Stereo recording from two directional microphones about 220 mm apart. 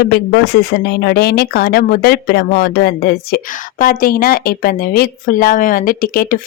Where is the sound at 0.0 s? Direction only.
45° left (ahead or behind).